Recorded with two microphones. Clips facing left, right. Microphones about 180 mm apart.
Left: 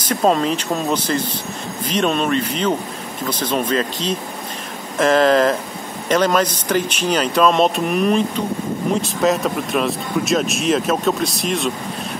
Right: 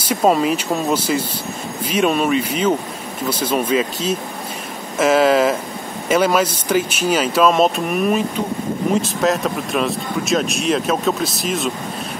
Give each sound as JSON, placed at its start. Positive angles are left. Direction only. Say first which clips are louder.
{"t": 0.0, "sound": "speech", "louder": "right 1 dB", "side_deg": -10}